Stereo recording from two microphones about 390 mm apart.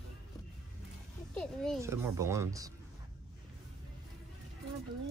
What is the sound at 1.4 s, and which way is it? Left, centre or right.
A child's voice, centre.